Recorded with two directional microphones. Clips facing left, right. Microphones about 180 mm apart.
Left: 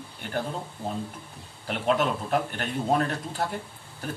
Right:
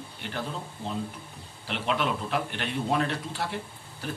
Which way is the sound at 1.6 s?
45° left (ahead or behind).